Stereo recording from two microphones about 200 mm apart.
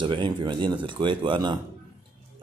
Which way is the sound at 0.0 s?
25° right (ahead or behind).